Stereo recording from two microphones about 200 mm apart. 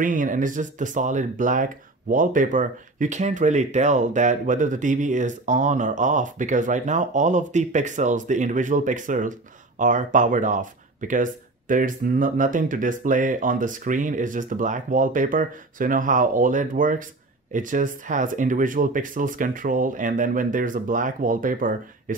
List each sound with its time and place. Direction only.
0.0 s speech: 40° right (ahead or behind)